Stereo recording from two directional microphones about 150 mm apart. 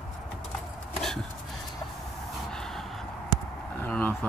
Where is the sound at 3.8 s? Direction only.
10° left (ahead or behind).